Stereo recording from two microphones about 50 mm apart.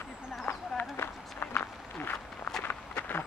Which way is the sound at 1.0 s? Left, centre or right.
Left.